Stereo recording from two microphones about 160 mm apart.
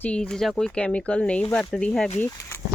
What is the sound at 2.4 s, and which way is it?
Speech, 20° left (ahead or behind).